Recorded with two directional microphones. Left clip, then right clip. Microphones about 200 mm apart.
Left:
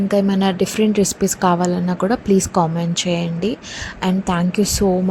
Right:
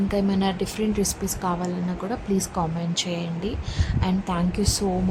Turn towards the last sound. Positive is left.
turn(degrees=20)  # may be behind; listen again after turning